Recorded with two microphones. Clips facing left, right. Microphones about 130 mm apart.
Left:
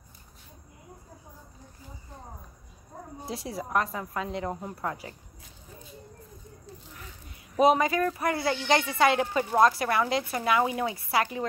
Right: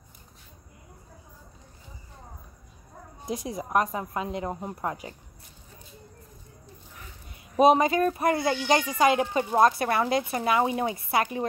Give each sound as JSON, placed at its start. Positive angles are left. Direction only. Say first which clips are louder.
{"t": 3.3, "sound": "speech", "louder": "right 3 dB", "side_deg": -20}
{"t": 7.5, "sound": "speech", "louder": "right 3 dB", "side_deg": -25}